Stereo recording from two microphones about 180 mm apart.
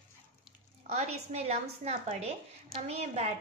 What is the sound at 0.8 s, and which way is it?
A woman's voice, 35° right (ahead or behind).